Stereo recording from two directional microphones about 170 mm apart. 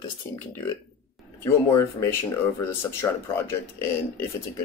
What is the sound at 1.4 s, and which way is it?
Speech, 15° left (ahead or behind).